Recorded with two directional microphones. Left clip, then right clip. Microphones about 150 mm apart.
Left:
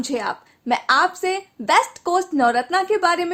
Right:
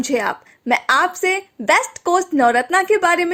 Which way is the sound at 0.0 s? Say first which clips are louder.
Right 5 dB; 30° right (ahead or behind).